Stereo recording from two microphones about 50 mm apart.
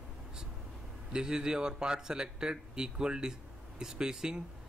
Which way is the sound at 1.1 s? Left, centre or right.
Centre.